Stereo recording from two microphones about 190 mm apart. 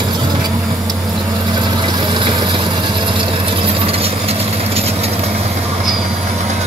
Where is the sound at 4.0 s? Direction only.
30° right (ahead or behind).